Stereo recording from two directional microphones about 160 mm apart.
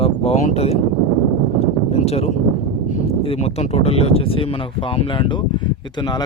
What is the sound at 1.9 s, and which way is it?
Speech, 40° left (ahead or behind).